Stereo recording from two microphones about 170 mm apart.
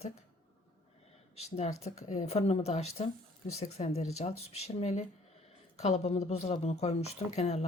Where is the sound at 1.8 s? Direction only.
40° left (ahead or behind).